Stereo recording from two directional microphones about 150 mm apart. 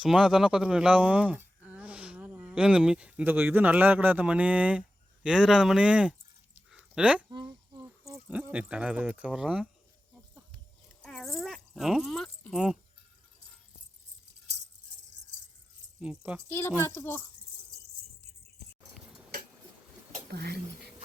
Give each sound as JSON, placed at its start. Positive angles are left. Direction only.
{"t": 0.0, "sound": "a man's voice", "side_deg": -5}
{"t": 6.7, "sound": "a sound", "side_deg": -5}
{"t": 7.3, "sound": "a sound", "side_deg": -30}
{"t": 8.3, "sound": "speech", "side_deg": -10}
{"t": 11.0, "sound": "speech", "side_deg": 5}
{"t": 16.0, "sound": "speech", "side_deg": -10}
{"t": 16.5, "sound": "speech", "side_deg": 15}
{"t": 18.9, "sound": "a sound", "side_deg": 0}
{"t": 20.3, "sound": "speech", "side_deg": -90}